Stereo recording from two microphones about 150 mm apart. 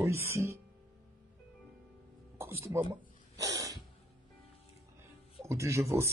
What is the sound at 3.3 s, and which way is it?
Snort, 20° right (ahead or behind).